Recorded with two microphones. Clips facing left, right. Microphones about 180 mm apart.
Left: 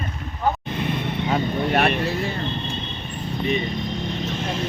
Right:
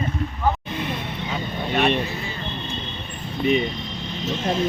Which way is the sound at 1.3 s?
60° left (ahead or behind).